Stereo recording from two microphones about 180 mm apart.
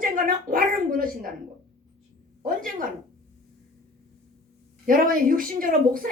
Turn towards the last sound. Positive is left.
turn(degrees=-50)  # may be behind; listen again after turning